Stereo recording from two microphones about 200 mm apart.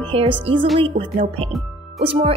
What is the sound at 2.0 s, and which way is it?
Speech, 30° right (ahead or behind).